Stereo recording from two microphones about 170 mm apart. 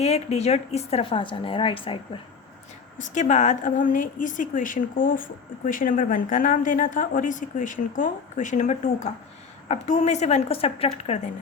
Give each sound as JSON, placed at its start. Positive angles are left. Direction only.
{"t": 0.0, "sound": "a woman's voice", "side_deg": 40}
{"t": 3.0, "sound": "a woman's voice", "side_deg": 45}